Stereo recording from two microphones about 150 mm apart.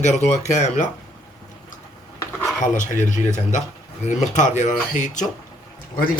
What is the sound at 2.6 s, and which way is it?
Speech, 55° left (ahead or behind).